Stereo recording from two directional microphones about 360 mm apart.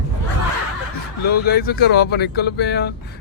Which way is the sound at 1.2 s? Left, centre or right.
Left.